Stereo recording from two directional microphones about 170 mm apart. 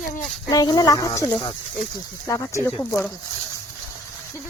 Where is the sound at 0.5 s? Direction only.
25° left (ahead or behind).